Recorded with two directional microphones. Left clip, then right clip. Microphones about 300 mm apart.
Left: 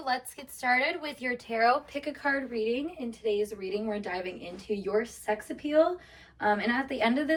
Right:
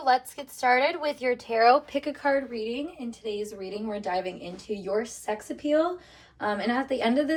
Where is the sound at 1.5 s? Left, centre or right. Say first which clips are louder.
Right 5 dB; right.